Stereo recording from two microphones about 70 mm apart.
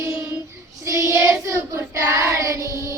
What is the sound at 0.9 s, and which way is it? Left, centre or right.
Child singing, right.